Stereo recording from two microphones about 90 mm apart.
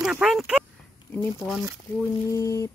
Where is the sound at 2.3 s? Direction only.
40° left (ahead or behind).